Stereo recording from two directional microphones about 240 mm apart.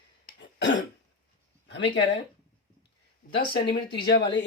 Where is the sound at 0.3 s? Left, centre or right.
Left.